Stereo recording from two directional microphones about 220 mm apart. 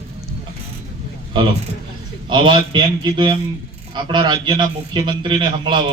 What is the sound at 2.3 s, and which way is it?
A man's voice, 20° right (ahead or behind).